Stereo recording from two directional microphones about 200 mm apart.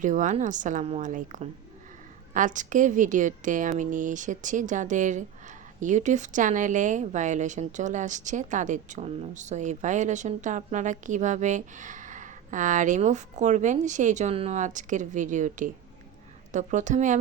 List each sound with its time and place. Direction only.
0.0 s a woman's voice: 40° right (ahead or behind)